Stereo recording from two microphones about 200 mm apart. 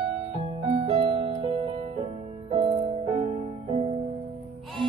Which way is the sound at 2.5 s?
25° right (ahead or behind).